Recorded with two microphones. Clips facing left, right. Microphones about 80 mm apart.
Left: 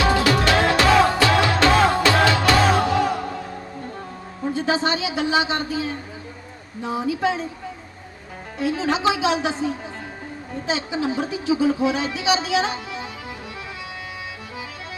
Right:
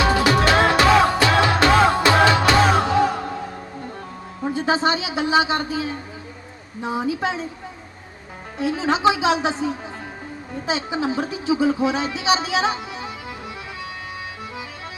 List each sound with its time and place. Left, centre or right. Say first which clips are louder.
0.0 s music: right 1 dB; right
4.5 s speech: right 2 dB; right
8.5 s speech: right 1 dB; right
10.7 s speech: right 1 dB; right